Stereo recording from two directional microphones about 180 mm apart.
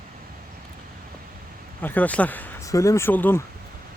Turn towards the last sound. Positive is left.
turn(degrees=10)  # may be behind; listen again after turning